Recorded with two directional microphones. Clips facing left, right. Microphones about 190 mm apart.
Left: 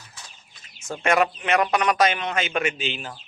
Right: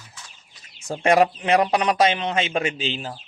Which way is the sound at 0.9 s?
30° right (ahead or behind).